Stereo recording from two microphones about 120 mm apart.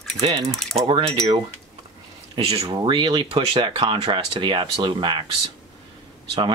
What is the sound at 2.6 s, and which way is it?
Speech, 40° right (ahead or behind).